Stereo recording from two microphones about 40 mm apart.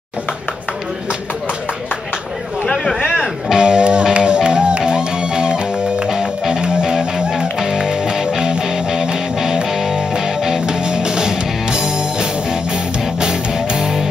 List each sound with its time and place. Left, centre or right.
3.5 s music: right